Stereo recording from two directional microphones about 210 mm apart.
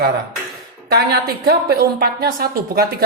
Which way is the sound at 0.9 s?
50° right (ahead or behind).